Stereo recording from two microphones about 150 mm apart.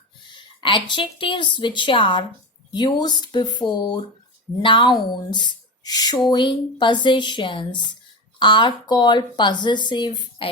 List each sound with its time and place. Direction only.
0.3 s speech: 30° left (ahead or behind)